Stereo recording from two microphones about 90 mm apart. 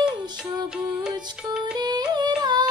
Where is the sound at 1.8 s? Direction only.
50° right (ahead or behind).